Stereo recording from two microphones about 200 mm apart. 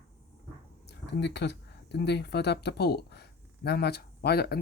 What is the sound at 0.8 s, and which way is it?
Speech, 55° left (ahead or behind).